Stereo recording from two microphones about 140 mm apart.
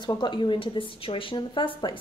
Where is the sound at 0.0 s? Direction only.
35° left (ahead or behind).